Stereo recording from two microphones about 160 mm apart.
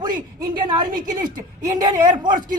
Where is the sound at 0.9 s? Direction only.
55° right (ahead or behind).